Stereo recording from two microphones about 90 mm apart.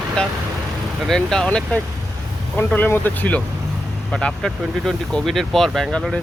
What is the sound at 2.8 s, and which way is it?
Speech, 20° left (ahead or behind).